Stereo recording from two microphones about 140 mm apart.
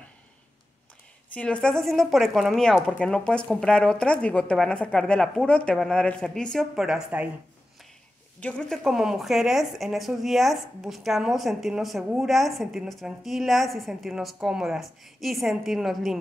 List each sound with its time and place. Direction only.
1.3 s speech: 10° left (ahead or behind)
8.4 s speech: 10° left (ahead or behind)